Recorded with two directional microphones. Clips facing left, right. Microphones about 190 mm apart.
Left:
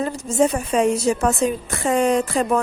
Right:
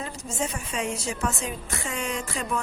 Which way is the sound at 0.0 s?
50° left (ahead or behind).